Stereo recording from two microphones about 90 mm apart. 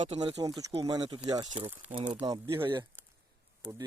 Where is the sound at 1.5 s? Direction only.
80° right.